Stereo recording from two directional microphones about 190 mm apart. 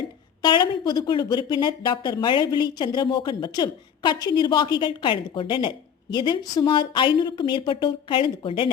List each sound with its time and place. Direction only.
0.4 s speech: 20° left (ahead or behind)